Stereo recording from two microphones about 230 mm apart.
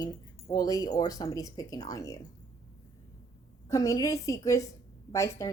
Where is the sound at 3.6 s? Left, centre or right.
Centre.